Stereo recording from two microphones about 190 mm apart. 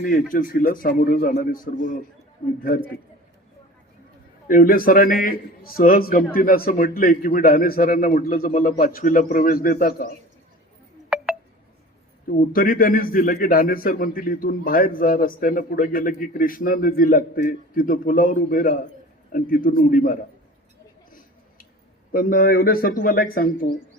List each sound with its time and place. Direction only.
0.0 s a man's voice: 45° left (ahead or behind)
4.4 s a man's voice: 45° left (ahead or behind)
11.1 s a sound: 5° right (ahead or behind)
12.4 s a man's voice: 45° left (ahead or behind)
22.1 s a man's voice: 50° left (ahead or behind)